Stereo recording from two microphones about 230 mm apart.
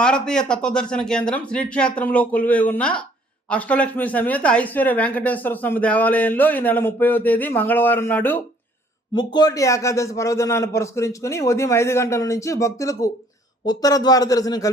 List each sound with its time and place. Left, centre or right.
0.0 s speech: centre